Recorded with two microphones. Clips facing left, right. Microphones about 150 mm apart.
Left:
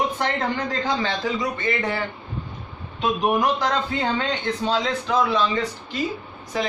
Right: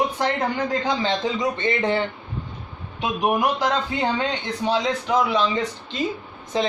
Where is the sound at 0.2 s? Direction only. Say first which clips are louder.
Right 1 dB; 15° right (ahead or behind).